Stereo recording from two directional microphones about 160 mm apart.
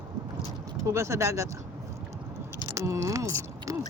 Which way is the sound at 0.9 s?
20° right (ahead or behind).